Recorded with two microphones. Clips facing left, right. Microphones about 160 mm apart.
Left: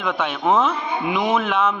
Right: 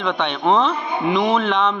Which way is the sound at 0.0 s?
5° left (ahead or behind).